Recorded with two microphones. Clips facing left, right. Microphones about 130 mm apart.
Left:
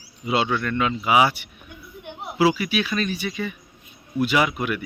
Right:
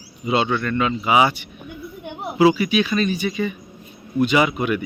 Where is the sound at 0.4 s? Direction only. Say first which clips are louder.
Right 2 dB; centre (ahead or behind).